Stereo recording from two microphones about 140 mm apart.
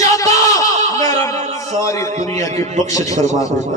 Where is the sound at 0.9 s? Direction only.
25° left (ahead or behind).